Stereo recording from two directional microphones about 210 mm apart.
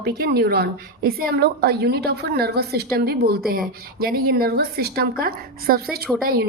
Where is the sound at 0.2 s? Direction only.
50° right (ahead or behind).